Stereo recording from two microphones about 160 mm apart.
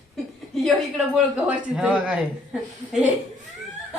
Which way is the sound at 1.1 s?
5° right (ahead or behind).